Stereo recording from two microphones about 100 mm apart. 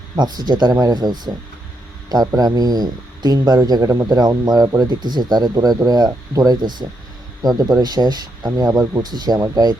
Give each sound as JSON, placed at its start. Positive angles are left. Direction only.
{"t": 0.2, "sound": "speech", "side_deg": -45}